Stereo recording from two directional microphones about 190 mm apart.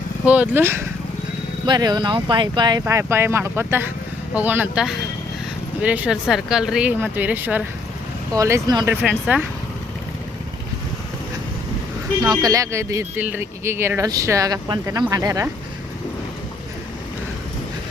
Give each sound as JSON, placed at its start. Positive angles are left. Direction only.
{"t": 0.3, "sound": "speech", "side_deg": -10}
{"t": 9.0, "sound": "speech", "side_deg": 5}
{"t": 12.2, "sound": "speech", "side_deg": -20}